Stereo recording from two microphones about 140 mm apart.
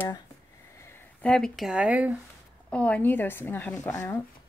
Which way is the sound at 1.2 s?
5° left (ahead or behind).